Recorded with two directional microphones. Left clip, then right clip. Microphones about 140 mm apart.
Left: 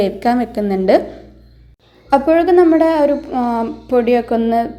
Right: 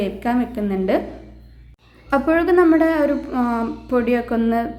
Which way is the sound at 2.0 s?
15° left (ahead or behind).